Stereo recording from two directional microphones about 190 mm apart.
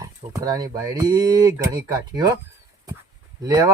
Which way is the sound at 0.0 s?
20° right (ahead or behind).